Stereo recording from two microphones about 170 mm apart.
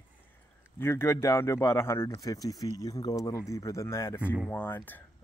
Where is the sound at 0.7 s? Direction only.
15° left (ahead or behind).